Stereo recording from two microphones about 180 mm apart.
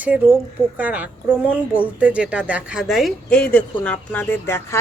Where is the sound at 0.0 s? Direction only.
10° right (ahead or behind).